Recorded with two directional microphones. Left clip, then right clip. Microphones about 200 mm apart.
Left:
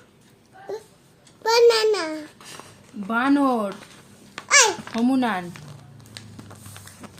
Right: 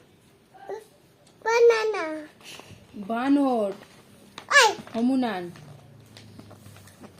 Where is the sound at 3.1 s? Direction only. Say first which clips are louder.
Left 3 dB; 60° left (ahead or behind).